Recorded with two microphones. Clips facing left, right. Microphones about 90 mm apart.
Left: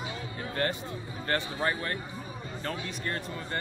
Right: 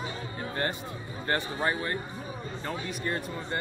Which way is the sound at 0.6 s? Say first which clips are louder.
Left 1 dB; 25° right (ahead or behind).